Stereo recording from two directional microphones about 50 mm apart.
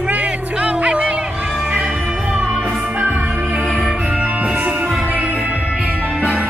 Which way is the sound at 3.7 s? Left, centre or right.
Centre.